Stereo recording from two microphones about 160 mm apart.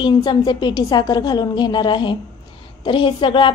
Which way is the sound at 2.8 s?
30° left (ahead or behind).